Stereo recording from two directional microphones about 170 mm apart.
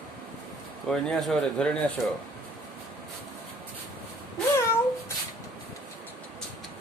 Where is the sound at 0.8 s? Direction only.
5° left (ahead or behind).